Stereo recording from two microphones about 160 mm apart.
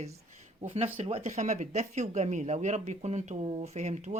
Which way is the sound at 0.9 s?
40° right (ahead or behind).